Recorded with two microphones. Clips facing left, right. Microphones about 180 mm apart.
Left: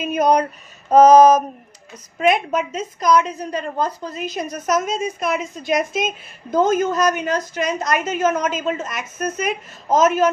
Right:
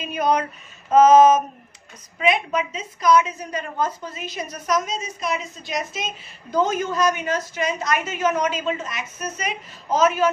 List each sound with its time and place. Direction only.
0.0 s a woman's voice: 45° left (ahead or behind)
4.4 s a woman's voice: 50° left (ahead or behind)